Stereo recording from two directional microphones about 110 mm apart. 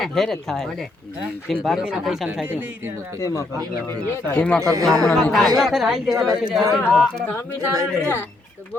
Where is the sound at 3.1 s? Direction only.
30° left (ahead or behind).